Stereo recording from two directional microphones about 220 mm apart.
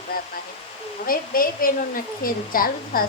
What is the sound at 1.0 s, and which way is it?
Speech, 40° left (ahead or behind).